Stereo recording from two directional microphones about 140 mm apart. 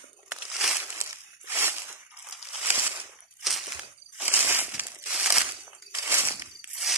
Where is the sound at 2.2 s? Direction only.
5° right (ahead or behind).